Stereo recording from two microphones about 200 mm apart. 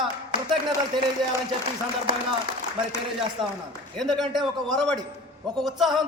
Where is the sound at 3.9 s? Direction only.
Centre (ahead or behind).